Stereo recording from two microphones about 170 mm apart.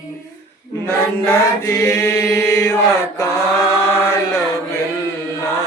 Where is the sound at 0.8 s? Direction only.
15° left (ahead or behind).